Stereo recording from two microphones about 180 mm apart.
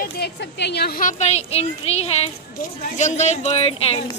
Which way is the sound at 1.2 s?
35° left (ahead or behind).